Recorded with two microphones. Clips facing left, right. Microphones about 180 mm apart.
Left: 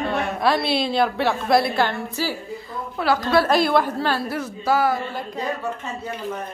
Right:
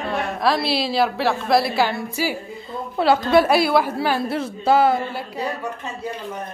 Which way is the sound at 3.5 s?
5° right (ahead or behind).